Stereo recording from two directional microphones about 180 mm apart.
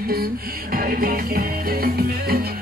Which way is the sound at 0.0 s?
55° right (ahead or behind).